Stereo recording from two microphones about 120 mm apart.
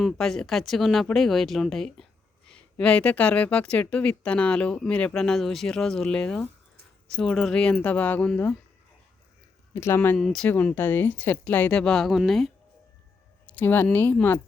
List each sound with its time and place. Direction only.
0.0 s speech: 5° left (ahead or behind)
9.7 s speech: 20° left (ahead or behind)
10.2 s speech: 5° left (ahead or behind)
10.5 s speech: 15° left (ahead or behind)
13.5 s speech: 15° left (ahead or behind)